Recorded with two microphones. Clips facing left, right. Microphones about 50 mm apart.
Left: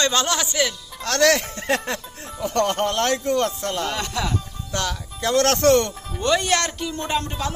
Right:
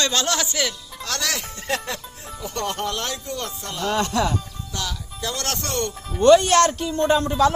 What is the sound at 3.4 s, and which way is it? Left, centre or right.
Speech, left.